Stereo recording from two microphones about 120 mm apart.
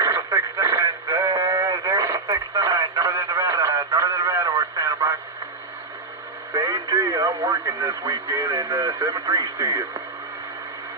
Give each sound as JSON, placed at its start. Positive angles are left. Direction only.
{"t": 0.0, "sound": "radio", "side_deg": -25}
{"t": 2.6, "sound": "a sound", "side_deg": -25}
{"t": 6.5, "sound": "speech", "side_deg": -30}